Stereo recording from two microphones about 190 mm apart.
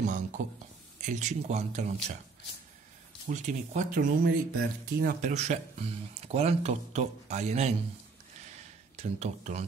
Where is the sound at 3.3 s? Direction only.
40° right (ahead or behind).